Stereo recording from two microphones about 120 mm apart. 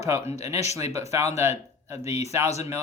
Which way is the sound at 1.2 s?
65° left (ahead or behind).